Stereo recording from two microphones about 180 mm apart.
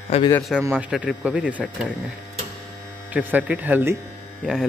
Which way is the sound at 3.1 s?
10° right (ahead or behind).